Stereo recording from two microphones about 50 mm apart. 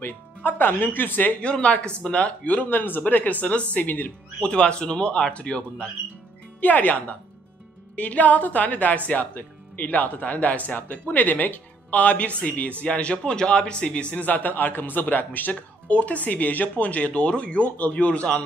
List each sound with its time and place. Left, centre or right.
0.0 s speech: left
1.4 s speech: left
4.4 s speech: centre
6.6 s speech: left